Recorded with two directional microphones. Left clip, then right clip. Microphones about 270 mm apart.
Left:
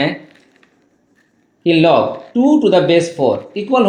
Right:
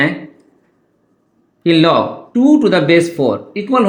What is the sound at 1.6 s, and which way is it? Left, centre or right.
Speech, right.